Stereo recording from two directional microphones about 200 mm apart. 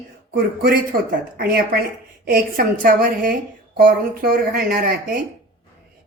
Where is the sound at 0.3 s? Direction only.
50° right (ahead or behind).